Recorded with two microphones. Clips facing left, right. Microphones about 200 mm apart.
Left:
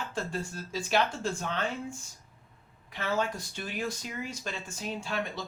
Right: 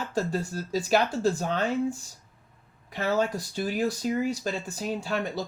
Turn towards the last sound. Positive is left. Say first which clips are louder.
# right 5 dB
turn(degrees=-40)  # may be behind; listen again after turning